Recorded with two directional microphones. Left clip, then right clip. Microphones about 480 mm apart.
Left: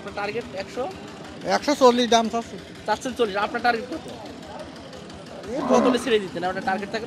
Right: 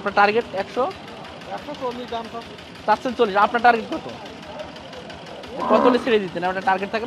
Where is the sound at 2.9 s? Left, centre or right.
Centre.